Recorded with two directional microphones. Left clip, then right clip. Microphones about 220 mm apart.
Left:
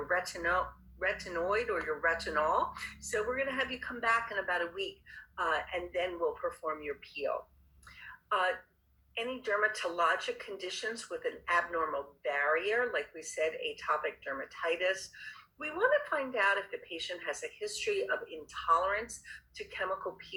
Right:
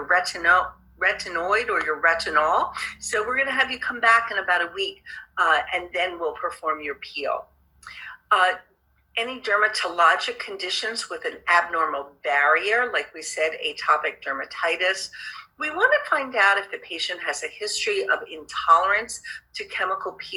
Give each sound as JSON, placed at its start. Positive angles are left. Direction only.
{"t": 0.0, "sound": "speech", "side_deg": -20}
{"t": 8.0, "sound": "a sound", "side_deg": -15}
{"t": 9.1, "sound": "speech", "side_deg": -15}